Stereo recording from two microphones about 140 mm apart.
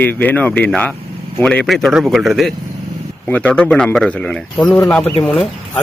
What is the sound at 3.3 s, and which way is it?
Speech, 10° left (ahead or behind).